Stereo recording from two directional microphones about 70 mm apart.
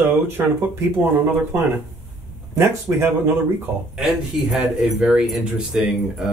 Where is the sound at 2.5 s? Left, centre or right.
Right.